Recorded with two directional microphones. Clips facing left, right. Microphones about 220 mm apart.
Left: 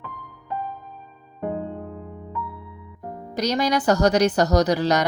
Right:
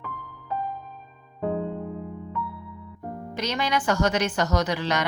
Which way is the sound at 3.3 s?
40° left (ahead or behind).